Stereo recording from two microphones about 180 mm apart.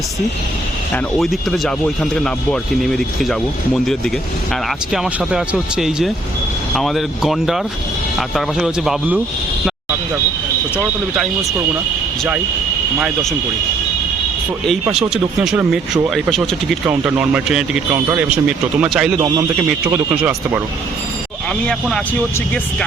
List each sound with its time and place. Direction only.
1.2 s speech: centre (ahead or behind)
4.9 s speech: 5° right (ahead or behind)
10.8 s speech: centre (ahead or behind)
14.9 s speech: 5° right (ahead or behind)
17.9 s speech: 15° right (ahead or behind)
21.7 s speech: 5° left (ahead or behind)